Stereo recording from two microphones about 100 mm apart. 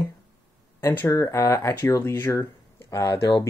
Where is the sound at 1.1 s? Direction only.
30° left (ahead or behind).